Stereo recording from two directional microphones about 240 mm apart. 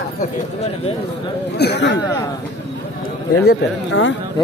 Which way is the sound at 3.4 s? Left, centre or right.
Left.